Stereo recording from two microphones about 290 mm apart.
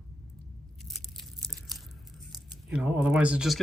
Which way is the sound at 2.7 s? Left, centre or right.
Centre.